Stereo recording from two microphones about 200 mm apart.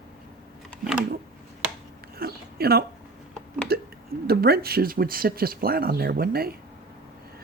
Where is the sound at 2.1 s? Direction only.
50° right (ahead or behind).